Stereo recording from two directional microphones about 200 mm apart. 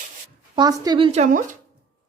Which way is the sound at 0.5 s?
20° right (ahead or behind).